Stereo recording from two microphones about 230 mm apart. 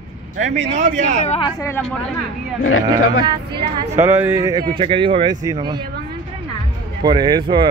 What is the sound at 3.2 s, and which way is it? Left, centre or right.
Speech, right.